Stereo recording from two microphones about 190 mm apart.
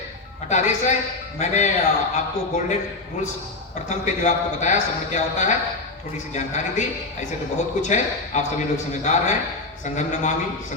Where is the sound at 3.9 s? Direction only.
40° left (ahead or behind).